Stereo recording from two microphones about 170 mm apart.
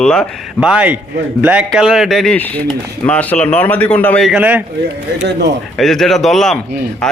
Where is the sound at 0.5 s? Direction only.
5° right (ahead or behind).